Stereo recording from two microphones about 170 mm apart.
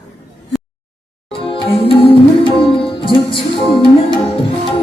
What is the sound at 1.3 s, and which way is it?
Music, 30° left (ahead or behind).